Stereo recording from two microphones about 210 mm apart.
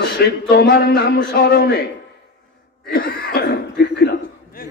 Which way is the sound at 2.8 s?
45° left (ahead or behind).